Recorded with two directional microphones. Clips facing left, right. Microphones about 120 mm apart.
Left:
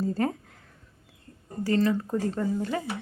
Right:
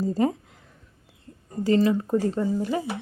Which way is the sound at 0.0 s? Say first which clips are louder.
Right 4 dB; 15° right (ahead or behind).